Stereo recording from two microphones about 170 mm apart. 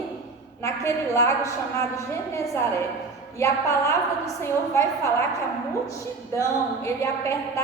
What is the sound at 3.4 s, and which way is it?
A woman's voice, 20° left (ahead or behind).